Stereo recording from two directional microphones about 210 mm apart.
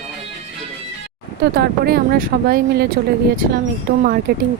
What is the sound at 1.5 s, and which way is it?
Speech, 50° right (ahead or behind).